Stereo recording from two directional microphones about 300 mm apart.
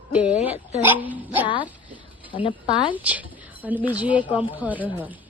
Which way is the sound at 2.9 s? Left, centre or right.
Centre.